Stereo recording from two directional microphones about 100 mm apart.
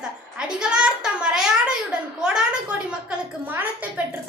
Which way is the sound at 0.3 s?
10° right (ahead or behind).